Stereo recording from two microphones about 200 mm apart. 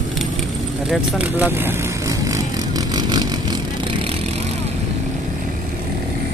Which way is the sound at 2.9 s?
20° right (ahead or behind).